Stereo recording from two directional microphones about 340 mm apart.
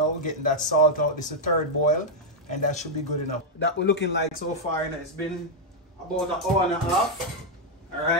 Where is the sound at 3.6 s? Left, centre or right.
Left.